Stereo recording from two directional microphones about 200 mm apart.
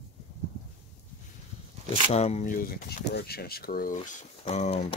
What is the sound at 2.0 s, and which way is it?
Speech, 30° left (ahead or behind).